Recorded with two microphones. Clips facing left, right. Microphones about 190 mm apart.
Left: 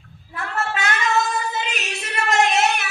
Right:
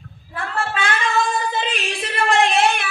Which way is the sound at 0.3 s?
30° right (ahead or behind).